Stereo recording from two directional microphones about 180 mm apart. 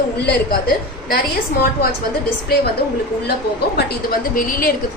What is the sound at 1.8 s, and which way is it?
Speech, 60° left (ahead or behind).